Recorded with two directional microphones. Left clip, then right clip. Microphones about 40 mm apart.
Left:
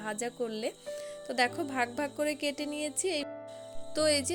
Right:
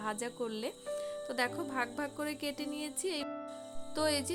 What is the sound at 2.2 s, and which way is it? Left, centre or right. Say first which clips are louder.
A woman's voice: left 6 dB; left.